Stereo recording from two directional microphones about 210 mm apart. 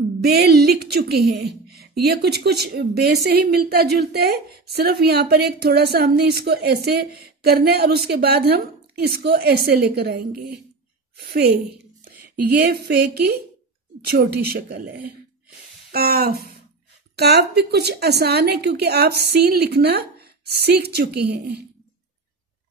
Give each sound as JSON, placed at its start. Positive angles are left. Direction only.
{"t": 0.2, "sound": "a woman's voice", "side_deg": -50}